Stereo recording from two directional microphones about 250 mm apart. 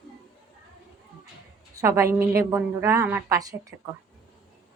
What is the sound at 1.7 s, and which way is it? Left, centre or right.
A woman's voice, centre.